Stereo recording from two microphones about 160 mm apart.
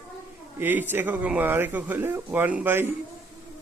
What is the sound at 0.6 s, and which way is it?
A man's voice, 10° right (ahead or behind).